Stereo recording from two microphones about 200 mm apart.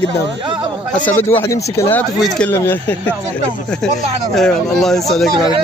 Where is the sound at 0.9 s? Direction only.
10° left (ahead or behind).